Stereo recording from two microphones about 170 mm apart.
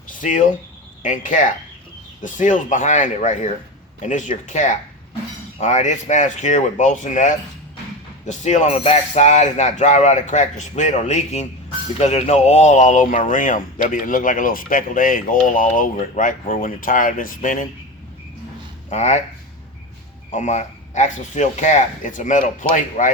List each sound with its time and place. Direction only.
0.1 s speech: 50° left (ahead or behind)
18.9 s speech: 40° left (ahead or behind)
20.3 s speech: 45° left (ahead or behind)